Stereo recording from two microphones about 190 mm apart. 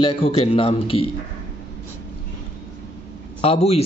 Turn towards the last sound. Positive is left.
turn(degrees=35)  # may be behind; listen again after turning